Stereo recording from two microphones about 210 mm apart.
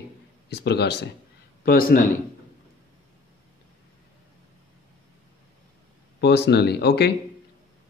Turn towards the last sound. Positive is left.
turn(degrees=50)  # may be behind; listen again after turning